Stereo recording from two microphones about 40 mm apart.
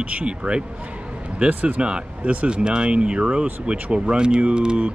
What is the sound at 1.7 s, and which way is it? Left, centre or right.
Speech, right.